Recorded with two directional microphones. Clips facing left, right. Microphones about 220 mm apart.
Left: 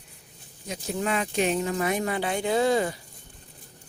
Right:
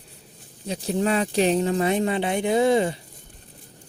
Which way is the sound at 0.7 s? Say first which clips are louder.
Right 5 dB; 30° right (ahead or behind).